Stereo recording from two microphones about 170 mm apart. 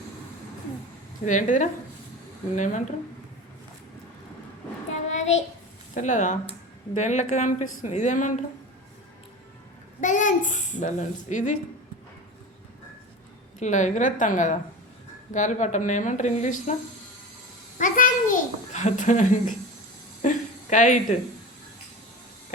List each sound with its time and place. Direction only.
1.2 s speech: 45° left (ahead or behind)
4.9 s child singing: 45° left (ahead or behind)
6.0 s speech: 45° left (ahead or behind)
10.0 s speech: 45° left (ahead or behind)
13.6 s speech: 45° left (ahead or behind)
17.7 s a child's voice: 50° left (ahead or behind)
20.2 s a sound: 50° left (ahead or behind)